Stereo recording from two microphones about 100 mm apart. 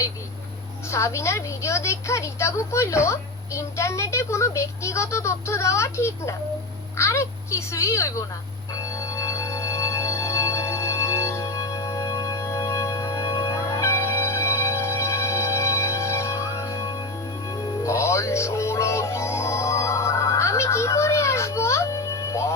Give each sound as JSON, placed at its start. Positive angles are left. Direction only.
{"t": 0.9, "sound": "a woman's voice", "side_deg": 30}
{"t": 8.7, "sound": "organ", "side_deg": 35}
{"t": 17.5, "sound": "music", "side_deg": 30}